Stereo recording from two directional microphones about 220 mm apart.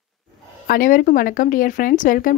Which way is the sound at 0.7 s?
40° left (ahead or behind).